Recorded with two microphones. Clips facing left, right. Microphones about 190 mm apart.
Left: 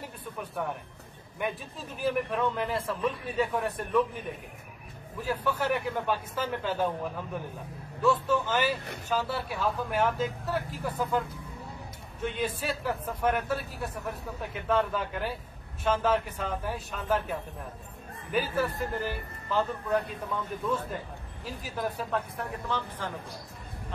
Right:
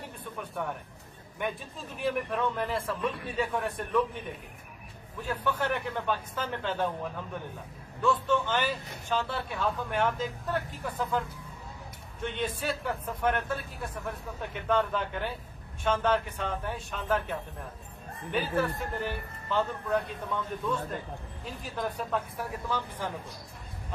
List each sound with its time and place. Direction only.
0.4 s speech: centre (ahead or behind)
8.0 s speech: 5° left (ahead or behind)
21.6 s speech: 5° left (ahead or behind)